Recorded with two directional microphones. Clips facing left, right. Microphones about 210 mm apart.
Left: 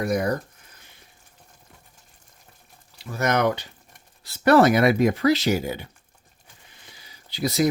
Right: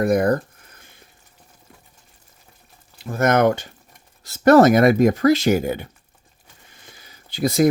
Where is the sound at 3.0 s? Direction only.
50° right (ahead or behind).